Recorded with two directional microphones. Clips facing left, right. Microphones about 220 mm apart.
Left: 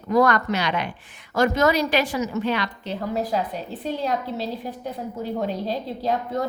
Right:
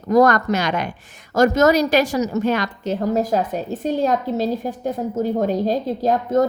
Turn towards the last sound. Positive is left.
turn(degrees=-45)  # may be behind; listen again after turning